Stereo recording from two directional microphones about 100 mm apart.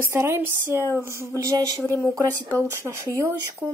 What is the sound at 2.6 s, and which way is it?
Speech, 25° right (ahead or behind).